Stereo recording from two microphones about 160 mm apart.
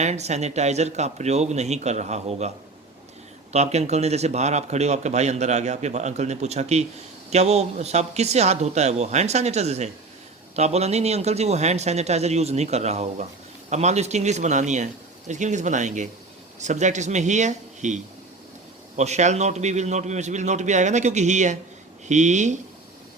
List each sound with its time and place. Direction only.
0.0 s speech: 45° right (ahead or behind)
3.5 s speech: 45° right (ahead or behind)